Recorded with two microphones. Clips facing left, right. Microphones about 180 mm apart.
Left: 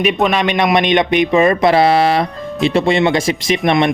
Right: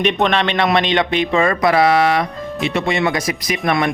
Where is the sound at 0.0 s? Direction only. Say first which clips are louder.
Left 2 dB; 5° left (ahead or behind).